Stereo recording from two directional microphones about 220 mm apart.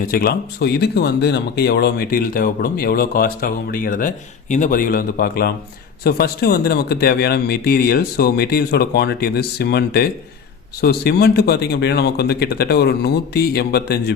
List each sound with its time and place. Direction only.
0.1 s speech: 45° left (ahead or behind)